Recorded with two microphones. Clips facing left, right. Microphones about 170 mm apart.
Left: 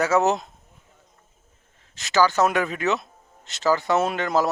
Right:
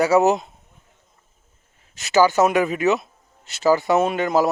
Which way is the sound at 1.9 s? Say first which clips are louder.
Right 4 dB; 15° right (ahead or behind).